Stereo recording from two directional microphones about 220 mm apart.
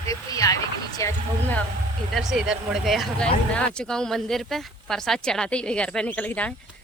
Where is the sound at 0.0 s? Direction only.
15° left (ahead or behind).